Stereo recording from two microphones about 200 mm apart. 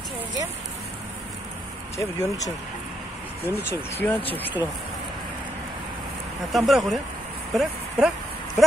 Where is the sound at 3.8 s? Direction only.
10° left (ahead or behind).